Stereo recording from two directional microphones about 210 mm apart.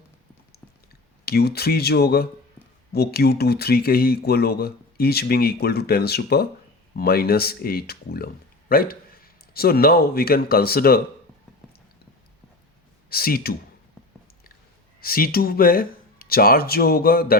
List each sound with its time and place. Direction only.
1.2 s a man's voice: 50° left (ahead or behind)
13.1 s speech: 45° left (ahead or behind)
15.0 s speech: 45° left (ahead or behind)